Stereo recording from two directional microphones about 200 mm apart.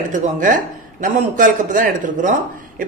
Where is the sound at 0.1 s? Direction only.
40° right (ahead or behind).